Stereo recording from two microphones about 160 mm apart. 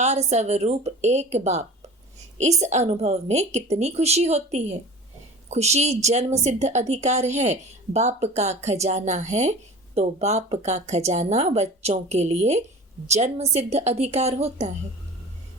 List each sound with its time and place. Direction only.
0.0 s a woman's voice: 45° right (ahead or behind)